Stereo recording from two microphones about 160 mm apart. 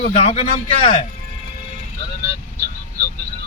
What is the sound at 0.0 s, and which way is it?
Speech, 45° left (ahead or behind).